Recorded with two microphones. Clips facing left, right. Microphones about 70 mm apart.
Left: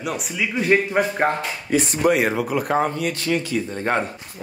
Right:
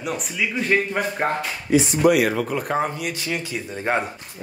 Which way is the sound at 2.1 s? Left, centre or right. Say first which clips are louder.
Even; left.